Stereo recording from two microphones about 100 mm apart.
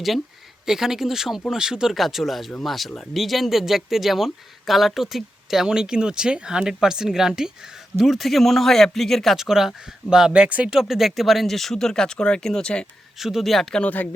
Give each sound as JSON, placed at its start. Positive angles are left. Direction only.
{"t": 0.6, "sound": "speech", "side_deg": -5}
{"t": 13.1, "sound": "speech", "side_deg": -5}
{"t": 13.8, "sound": "speech", "side_deg": 15}